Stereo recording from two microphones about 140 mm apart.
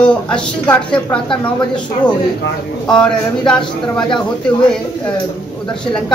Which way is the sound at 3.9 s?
35° left (ahead or behind).